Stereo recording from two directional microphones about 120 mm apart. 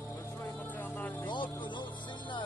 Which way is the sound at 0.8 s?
15° left (ahead or behind).